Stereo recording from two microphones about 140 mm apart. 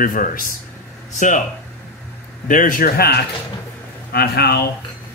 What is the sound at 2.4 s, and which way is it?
A man's voice, 75° left (ahead or behind).